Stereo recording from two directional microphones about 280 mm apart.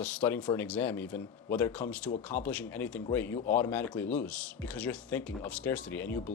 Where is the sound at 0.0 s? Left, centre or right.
Centre.